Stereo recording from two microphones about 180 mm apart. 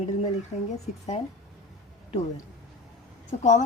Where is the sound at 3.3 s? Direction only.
40° left (ahead or behind).